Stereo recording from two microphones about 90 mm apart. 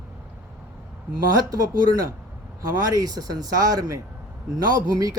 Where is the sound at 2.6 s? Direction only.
45° right (ahead or behind).